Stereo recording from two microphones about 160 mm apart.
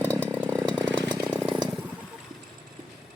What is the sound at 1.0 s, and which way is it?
Chainsaw, 25° right (ahead or behind).